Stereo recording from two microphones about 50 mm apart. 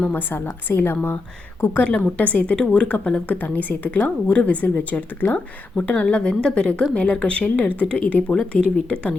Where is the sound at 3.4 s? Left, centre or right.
Left.